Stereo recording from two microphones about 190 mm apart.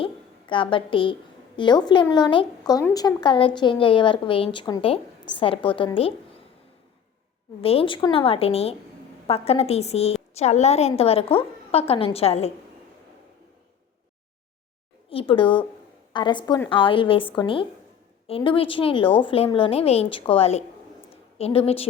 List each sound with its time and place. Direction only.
0.0 s a sound: 25° left (ahead or behind)
1.5 s a woman's voice: 25° left (ahead or behind)
7.6 s a woman's voice: 30° left (ahead or behind)
15.1 s a woman's voice: 30° left (ahead or behind)